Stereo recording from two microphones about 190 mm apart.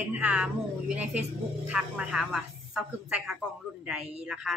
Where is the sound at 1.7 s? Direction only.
5° right (ahead or behind).